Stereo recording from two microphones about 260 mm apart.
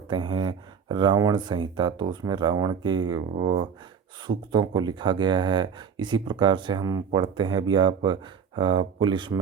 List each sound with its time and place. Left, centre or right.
0.1 s speech: centre